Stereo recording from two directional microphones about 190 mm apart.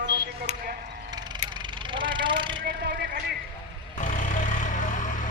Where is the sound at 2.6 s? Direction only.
60° right (ahead or behind).